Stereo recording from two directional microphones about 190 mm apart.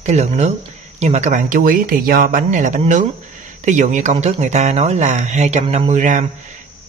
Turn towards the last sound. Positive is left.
turn(degrees=-40)  # may be behind; listen again after turning